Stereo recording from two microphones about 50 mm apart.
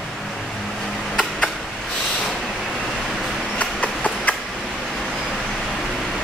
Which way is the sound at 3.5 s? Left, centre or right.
Left.